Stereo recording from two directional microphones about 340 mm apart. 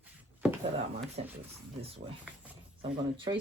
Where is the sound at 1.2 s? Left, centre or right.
Centre.